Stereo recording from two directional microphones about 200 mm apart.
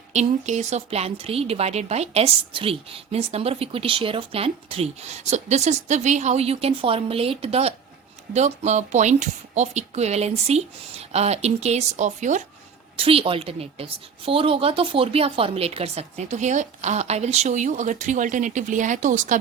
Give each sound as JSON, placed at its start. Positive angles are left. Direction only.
{"t": 0.1, "sound": "a woman's voice", "side_deg": -35}